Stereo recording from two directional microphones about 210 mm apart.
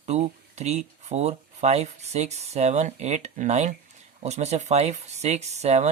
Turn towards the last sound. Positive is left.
turn(degrees=-30)  # may be behind; listen again after turning